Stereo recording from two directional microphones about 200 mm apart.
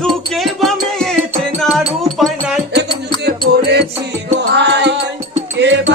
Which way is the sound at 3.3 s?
55° right (ahead or behind).